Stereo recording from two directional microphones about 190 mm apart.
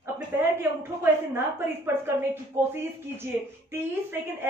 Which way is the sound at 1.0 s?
10° right (ahead or behind).